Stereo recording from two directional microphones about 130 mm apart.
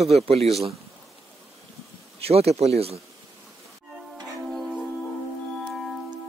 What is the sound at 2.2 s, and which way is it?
Speech, 50° right (ahead or behind).